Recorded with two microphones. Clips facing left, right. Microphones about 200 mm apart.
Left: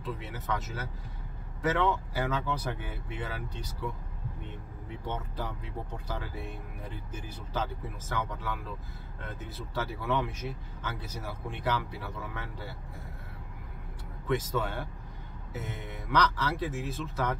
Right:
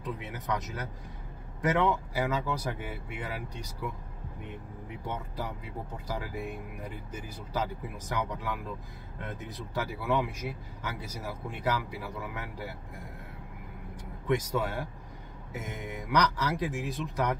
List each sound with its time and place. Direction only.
0.2 s speech: 15° right (ahead or behind)
4.8 s speech: 10° right (ahead or behind)
14.2 s speech: 15° right (ahead or behind)